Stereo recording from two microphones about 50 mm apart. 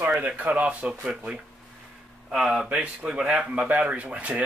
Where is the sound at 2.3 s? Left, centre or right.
Centre.